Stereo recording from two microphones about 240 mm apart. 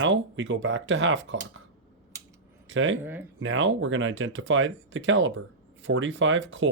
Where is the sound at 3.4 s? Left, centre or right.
Right.